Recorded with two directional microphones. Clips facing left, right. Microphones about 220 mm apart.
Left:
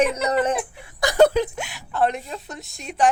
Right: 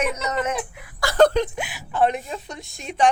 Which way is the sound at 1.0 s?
15° left (ahead or behind).